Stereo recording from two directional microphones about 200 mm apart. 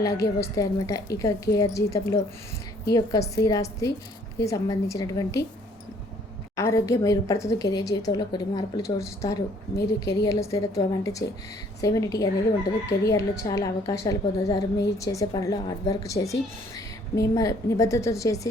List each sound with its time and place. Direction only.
0.0 s a woman's voice: 15° left (ahead or behind)
6.6 s a woman's voice: 15° left (ahead or behind)